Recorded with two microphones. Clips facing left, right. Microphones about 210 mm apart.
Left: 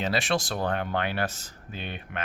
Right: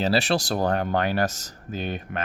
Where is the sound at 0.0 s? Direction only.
35° right (ahead or behind).